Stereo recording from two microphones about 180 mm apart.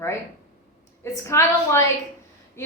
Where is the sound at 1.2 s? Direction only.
15° left (ahead or behind).